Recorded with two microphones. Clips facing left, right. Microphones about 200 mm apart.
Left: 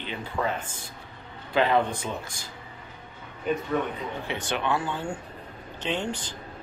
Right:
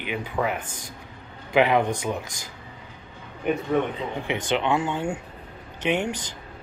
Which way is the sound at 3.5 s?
65° right (ahead or behind).